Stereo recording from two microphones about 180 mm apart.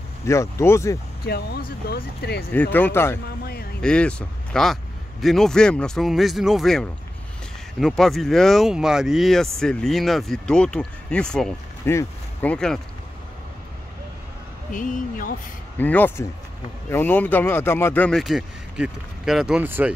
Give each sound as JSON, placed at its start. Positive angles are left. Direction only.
{"t": 0.2, "sound": "speech", "side_deg": 15}
{"t": 1.2, "sound": "speech", "side_deg": 60}
{"t": 2.5, "sound": "speech", "side_deg": 10}
{"t": 3.3, "sound": "speech", "side_deg": 60}
{"t": 3.8, "sound": "speech", "side_deg": 5}
{"t": 11.8, "sound": "speech", "side_deg": 15}
{"t": 14.7, "sound": "speech", "side_deg": 45}
{"t": 15.8, "sound": "speech", "side_deg": 10}